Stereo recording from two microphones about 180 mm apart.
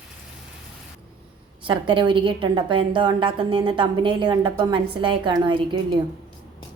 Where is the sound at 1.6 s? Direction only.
25° right (ahead or behind).